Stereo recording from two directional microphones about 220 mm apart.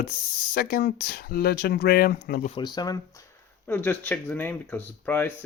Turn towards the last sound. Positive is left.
turn(degrees=10)  # may be behind; listen again after turning